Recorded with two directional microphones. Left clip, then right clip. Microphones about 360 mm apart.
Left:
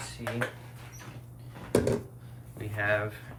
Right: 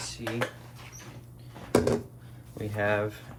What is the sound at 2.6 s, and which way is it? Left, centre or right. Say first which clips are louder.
Speech: right 1 dB; centre.